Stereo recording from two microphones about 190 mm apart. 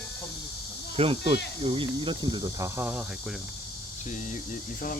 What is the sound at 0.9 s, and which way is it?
Speech, 30° right (ahead or behind).